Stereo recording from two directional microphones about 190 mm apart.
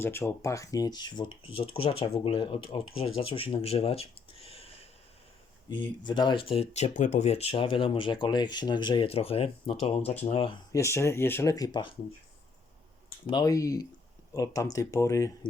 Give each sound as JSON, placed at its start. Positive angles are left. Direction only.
{"t": 0.0, "sound": "speech", "side_deg": 15}
{"t": 6.1, "sound": "speech", "side_deg": 25}
{"t": 10.7, "sound": "speech", "side_deg": 15}
{"t": 13.3, "sound": "speech", "side_deg": 20}